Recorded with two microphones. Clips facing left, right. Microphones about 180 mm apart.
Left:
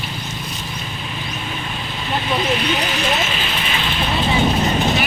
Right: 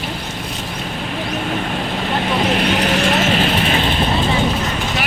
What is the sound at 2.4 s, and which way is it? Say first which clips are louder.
Vehicle: right 3 dB; 70° right (ahead or behind).